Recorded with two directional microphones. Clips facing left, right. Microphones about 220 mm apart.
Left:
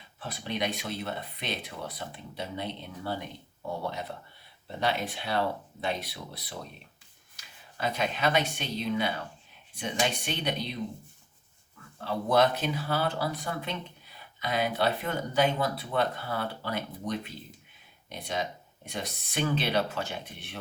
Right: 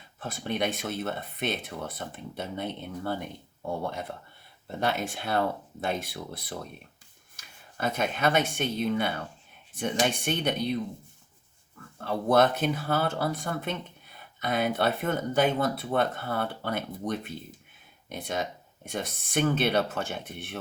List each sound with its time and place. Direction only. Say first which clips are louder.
0.2 s speech: right 3 dB; 50° right (ahead or behind)
4.8 s speech: right 1 dB; 50° right (ahead or behind)
11.9 s speech: right 2 dB; 50° right (ahead or behind)